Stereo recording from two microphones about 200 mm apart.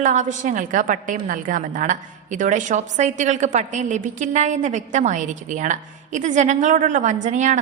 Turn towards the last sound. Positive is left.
turn(degrees=-35)  # may be behind; listen again after turning